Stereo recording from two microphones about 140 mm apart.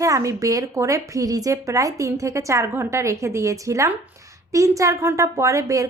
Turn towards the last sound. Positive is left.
turn(degrees=-25)  # may be behind; listen again after turning